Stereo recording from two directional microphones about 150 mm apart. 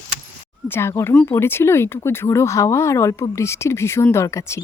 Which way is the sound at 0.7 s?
15° left (ahead or behind).